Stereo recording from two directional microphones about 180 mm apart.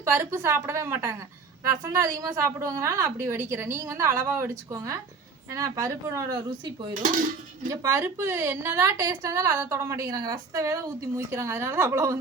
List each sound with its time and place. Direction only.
0.0 s a woman's voice: 15° right (ahead or behind)
6.9 s speech: 50° right (ahead or behind)
7.7 s a woman's voice: 15° right (ahead or behind)